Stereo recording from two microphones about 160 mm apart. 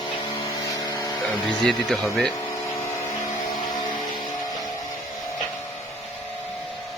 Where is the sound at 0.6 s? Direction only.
20° left (ahead or behind).